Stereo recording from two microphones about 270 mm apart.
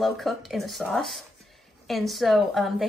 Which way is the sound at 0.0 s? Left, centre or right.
Centre.